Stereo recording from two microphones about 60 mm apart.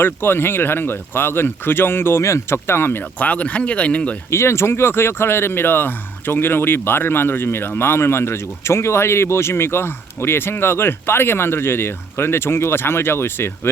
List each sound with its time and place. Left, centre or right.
0.0 s speech: left
2.2 s speech: left
3.0 s speech: left
4.3 s speech: left